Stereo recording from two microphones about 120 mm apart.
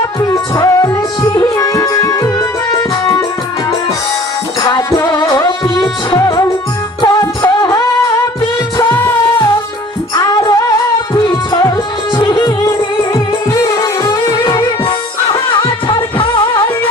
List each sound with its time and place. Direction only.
0.2 s music: 30° left (ahead or behind)
4.6 s music: 35° left (ahead or behind)
6.1 s music: 30° left (ahead or behind)
10.2 s music: 30° left (ahead or behind)
13.5 s music: 25° left (ahead or behind)
14.6 s music: 40° left (ahead or behind)